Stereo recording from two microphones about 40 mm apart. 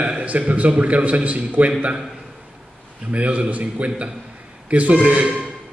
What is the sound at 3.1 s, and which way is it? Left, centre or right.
A man's voice, right.